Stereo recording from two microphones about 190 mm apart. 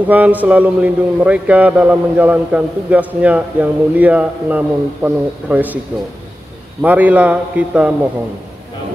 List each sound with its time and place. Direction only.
0.0 s a man's voice: 10° right (ahead or behind)
6.8 s a man's voice: 10° right (ahead or behind)